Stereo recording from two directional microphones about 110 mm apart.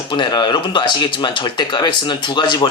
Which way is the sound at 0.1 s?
40° left (ahead or behind).